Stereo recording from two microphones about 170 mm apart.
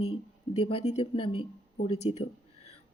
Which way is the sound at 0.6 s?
35° left (ahead or behind).